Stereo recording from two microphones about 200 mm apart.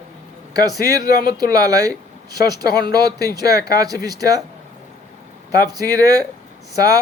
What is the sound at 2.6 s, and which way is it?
Speech, 50° left (ahead or behind).